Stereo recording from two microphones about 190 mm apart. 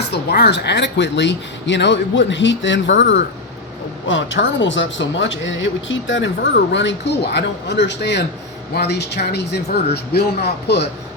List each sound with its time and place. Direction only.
0.1 s speech: 60° left (ahead or behind)